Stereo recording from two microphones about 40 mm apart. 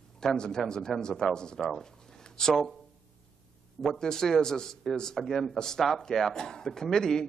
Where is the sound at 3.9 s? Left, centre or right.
Centre.